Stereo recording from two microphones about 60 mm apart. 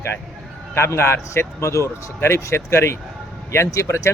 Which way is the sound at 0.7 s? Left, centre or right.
Left.